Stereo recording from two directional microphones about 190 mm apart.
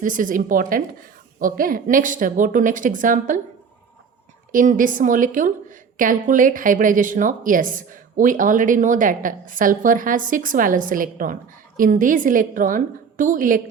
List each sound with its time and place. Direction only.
0.0 s a woman's voice: 45° right (ahead or behind)
4.5 s a woman's voice: 45° right (ahead or behind)